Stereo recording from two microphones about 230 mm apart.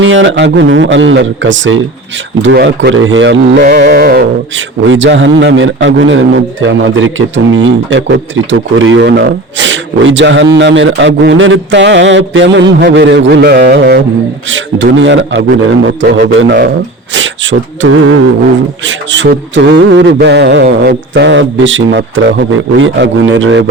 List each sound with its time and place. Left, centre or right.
0.0 s a man's voice: right
3.6 s a man's voice: right